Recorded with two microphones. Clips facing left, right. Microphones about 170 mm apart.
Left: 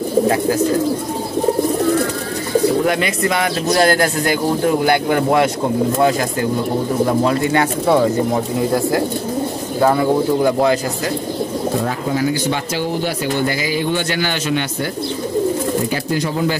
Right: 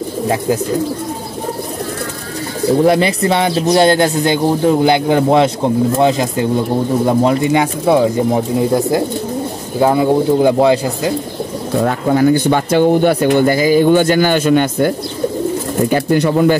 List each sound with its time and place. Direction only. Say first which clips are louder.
2.8 s speech: right 5 dB; 35° right (ahead or behind)
11.8 s speech: right 6 dB; 55° right (ahead or behind)
15.9 s speech: right 7 dB; 60° right (ahead or behind)